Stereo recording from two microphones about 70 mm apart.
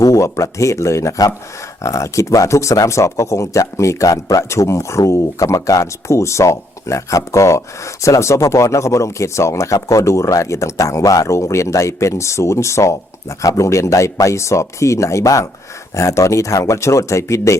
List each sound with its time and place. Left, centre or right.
0.0 s speech: left